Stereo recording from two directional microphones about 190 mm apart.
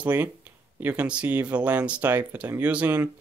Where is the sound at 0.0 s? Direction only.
10° right (ahead or behind).